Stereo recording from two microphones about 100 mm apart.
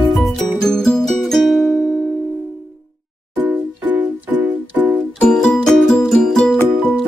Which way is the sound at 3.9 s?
20° right (ahead or behind).